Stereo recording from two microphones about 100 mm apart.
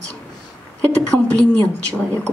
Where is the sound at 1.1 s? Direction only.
15° left (ahead or behind).